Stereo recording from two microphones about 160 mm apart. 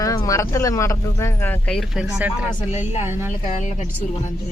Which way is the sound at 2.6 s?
40° left (ahead or behind).